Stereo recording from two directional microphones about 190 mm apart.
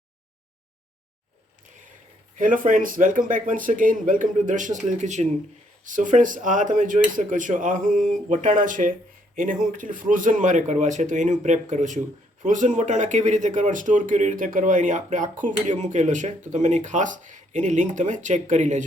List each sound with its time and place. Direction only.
2.3 s speech: 45° right (ahead or behind)